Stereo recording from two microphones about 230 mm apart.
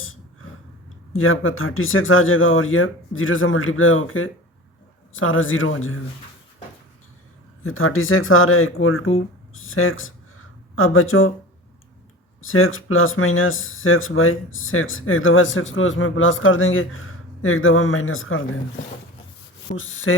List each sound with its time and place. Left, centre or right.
1.1 s speech: left
7.6 s speech: left
12.4 s speech: left
19.7 s speech: left